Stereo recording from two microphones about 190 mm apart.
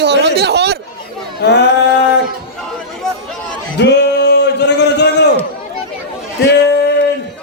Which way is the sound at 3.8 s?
65° left (ahead or behind).